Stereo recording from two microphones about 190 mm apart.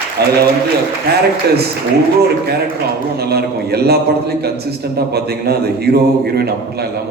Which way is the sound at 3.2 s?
55° right (ahead or behind).